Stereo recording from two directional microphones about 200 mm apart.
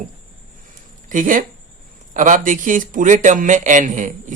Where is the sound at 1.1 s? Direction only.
40° right (ahead or behind).